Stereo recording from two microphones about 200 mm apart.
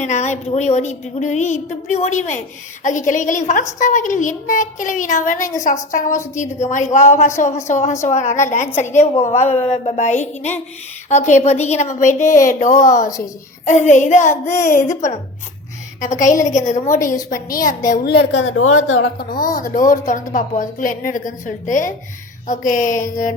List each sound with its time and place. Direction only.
0.0 s a woman's voice: 35° left (ahead or behind)
14.5 s speech: 15° left (ahead or behind)
14.8 s a woman's voice: 40° left (ahead or behind); by 19.1 s 80° left
19.2 s a woman's voice: 45° left (ahead or behind)